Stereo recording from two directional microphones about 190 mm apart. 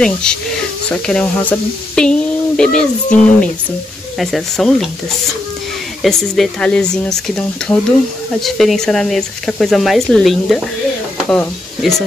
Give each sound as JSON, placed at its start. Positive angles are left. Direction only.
{"t": 0.0, "sound": "speech", "side_deg": 5}
{"t": 6.0, "sound": "speech", "side_deg": 0}